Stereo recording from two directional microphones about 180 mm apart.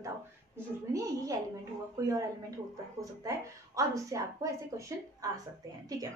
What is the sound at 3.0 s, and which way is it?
A woman's voice, 20° right (ahead or behind).